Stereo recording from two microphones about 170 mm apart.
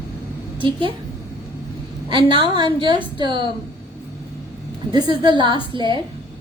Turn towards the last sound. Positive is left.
turn(degrees=-30)  # may be behind; listen again after turning